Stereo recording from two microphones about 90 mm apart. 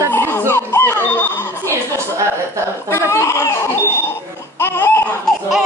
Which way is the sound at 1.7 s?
30° right (ahead or behind).